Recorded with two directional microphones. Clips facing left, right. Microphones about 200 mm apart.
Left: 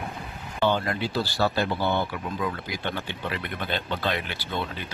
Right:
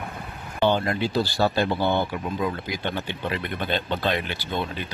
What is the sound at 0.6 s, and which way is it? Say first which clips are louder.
Speech: right 3 dB; 20° right (ahead or behind).